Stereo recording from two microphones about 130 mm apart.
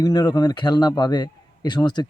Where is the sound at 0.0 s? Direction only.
30° left (ahead or behind).